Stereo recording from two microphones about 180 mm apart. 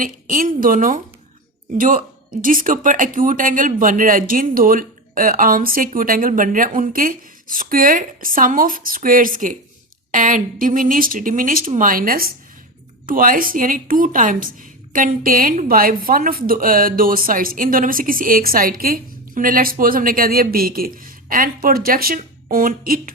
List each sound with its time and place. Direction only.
0.0 s a woman's voice: 50° right (ahead or behind)
2.4 s a woman's voice: 50° right (ahead or behind)